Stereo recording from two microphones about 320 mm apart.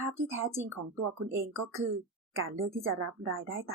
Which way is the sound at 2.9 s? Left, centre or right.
Right.